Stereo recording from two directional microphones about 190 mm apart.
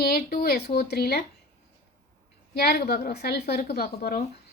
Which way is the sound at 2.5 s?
60° left (ahead or behind).